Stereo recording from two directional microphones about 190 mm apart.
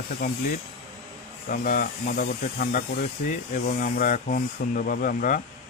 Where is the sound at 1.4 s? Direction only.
45° left (ahead or behind).